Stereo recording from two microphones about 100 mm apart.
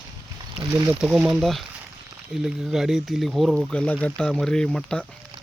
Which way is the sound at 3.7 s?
15° left (ahead or behind).